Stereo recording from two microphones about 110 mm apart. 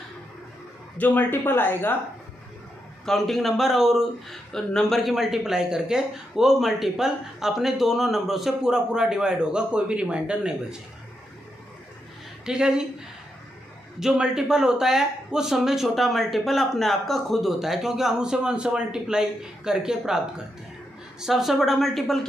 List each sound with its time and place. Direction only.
0.9 s speech: 15° left (ahead or behind)
3.1 s speech: centre (ahead or behind)
12.4 s a woman's voice: 5° right (ahead or behind)
13.9 s speech: 5° right (ahead or behind)
21.2 s speech: 5° right (ahead or behind)